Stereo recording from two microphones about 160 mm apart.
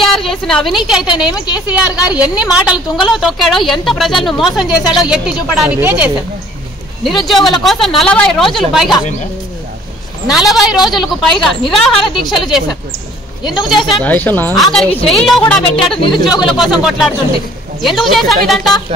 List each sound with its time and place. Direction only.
0.0 s a woman's voice: centre (ahead or behind)
1.3 s a woman's voice: 25° left (ahead or behind)
1.7 s a woman's voice: 10° right (ahead or behind)
10.2 s a woman's voice: centre (ahead or behind)
13.7 s a woman's voice: centre (ahead or behind)
14.0 s speech: 10° left (ahead or behind)
14.5 s a woman's voice: centre (ahead or behind)